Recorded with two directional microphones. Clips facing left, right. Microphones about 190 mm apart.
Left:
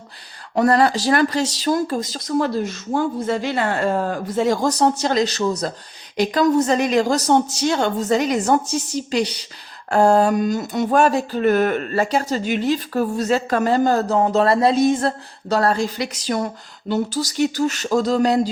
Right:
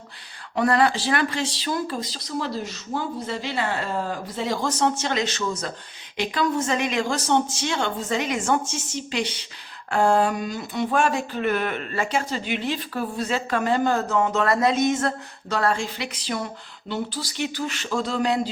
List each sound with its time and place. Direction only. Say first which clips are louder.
0.5 s speech: left 4 dB; 40° left (ahead or behind)